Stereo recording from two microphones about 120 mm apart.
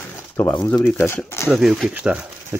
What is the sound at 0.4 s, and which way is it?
Speech, 15° left (ahead or behind).